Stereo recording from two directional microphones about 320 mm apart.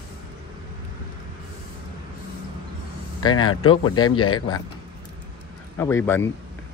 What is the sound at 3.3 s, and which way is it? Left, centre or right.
A man's voice, left.